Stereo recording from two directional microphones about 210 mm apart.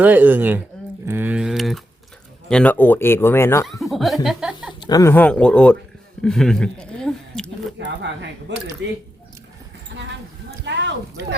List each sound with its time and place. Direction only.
0.0 s a man's voice: 10° right (ahead or behind); by 3.7 s 10° left (ahead or behind)
3.7 s speech: centre (ahead or behind)
4.8 s speech: 15° left (ahead or behind)
7.8 s speech: 55° right (ahead or behind)
10.7 s a sound: 55° right (ahead or behind)